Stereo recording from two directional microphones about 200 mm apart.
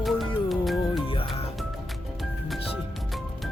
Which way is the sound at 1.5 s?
Centre (ahead or behind).